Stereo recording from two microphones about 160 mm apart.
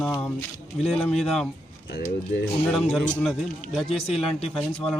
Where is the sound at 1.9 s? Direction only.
90° left.